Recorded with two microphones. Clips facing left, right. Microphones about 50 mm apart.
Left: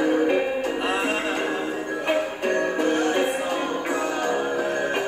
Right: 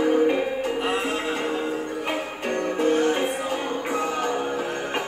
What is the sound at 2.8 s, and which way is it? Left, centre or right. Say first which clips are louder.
Music: right 3 dB; left.